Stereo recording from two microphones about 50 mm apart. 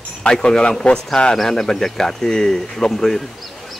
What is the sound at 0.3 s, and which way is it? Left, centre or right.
Speech, centre.